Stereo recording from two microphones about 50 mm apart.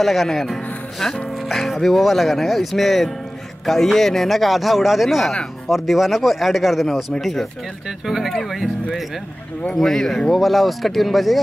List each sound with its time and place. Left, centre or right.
0.0 s speech: centre
9.8 s speech: centre